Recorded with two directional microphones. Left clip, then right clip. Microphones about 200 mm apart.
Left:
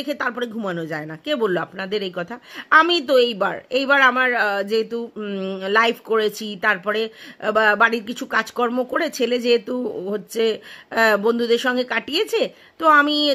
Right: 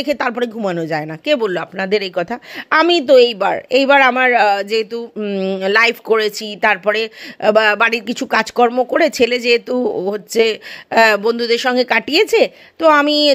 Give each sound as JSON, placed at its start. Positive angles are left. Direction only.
{"t": 0.0, "sound": "speech", "side_deg": -30}